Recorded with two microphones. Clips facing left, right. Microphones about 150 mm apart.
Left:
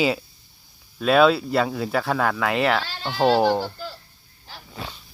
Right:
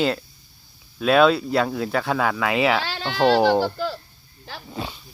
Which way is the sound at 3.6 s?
80° right.